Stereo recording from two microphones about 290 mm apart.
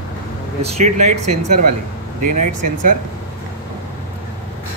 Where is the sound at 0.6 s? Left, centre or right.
Right.